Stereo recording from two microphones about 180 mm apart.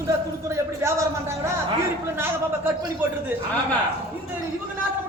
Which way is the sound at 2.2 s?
15° right (ahead or behind).